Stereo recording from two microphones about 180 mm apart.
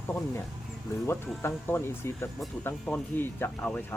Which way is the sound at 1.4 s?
15° left (ahead or behind).